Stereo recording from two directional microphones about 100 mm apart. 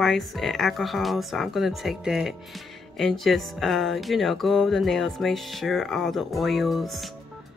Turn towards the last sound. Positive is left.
turn(degrees=0)  # may be behind; listen again after turning